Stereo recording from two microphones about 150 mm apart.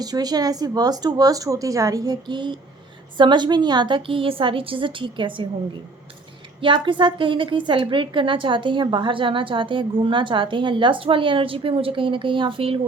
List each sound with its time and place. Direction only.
0.0 s a woman's voice: 25° right (ahead or behind)
6.6 s a woman's voice: 35° right (ahead or behind)